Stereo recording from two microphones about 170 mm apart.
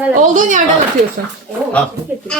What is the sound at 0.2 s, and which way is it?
Speech, 50° right (ahead or behind).